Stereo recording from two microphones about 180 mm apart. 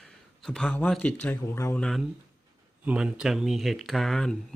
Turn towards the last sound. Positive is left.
turn(degrees=5)  # may be behind; listen again after turning